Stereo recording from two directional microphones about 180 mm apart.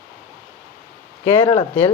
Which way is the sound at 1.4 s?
30° left (ahead or behind).